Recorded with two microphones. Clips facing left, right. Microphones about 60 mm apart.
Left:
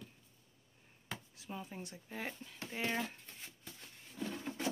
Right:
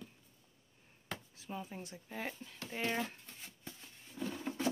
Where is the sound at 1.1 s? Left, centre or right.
Centre.